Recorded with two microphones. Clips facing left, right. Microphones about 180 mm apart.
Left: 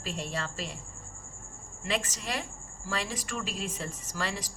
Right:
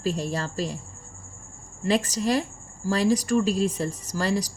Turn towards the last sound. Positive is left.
turn(degrees=-40)  # may be behind; listen again after turning